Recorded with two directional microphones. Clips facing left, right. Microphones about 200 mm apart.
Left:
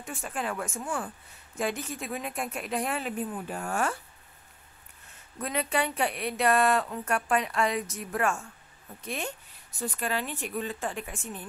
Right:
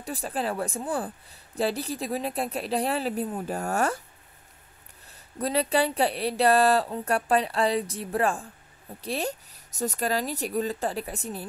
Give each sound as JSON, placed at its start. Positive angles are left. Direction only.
{"t": 0.0, "sound": "speech", "side_deg": -35}
{"t": 5.0, "sound": "speech", "side_deg": -35}